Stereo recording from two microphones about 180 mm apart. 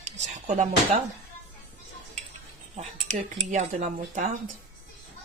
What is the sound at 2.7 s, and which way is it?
Speech, 40° right (ahead or behind).